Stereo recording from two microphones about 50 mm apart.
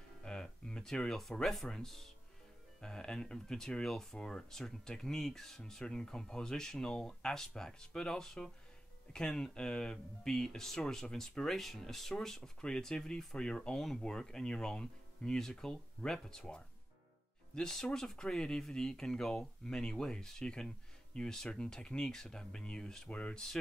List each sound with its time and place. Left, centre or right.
0.2 s speech: centre